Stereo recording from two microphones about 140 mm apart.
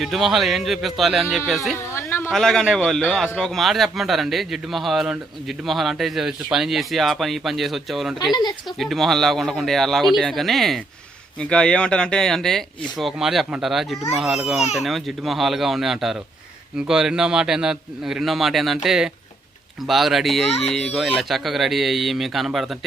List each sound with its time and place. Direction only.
0.0 s speech: centre (ahead or behind)
1.9 s a sound: 15° left (ahead or behind)
2.3 s speech: 5° left (ahead or behind)
20.5 s speech: 45° left (ahead or behind)
20.7 s speech: centre (ahead or behind)